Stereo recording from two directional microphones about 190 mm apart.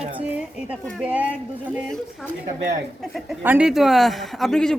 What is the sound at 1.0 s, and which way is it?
Speech, 5° right (ahead or behind).